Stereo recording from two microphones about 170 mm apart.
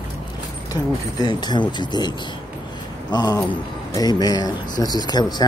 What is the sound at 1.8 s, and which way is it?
Speech, 25° left (ahead or behind).